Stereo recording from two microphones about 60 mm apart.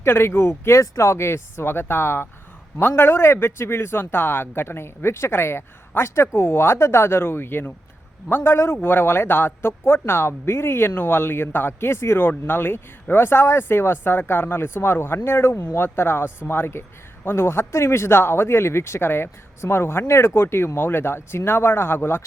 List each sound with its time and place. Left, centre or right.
0.0 s speech: left
0.8 s speech: left